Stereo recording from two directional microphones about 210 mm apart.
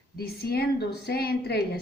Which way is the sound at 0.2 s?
45° left (ahead or behind).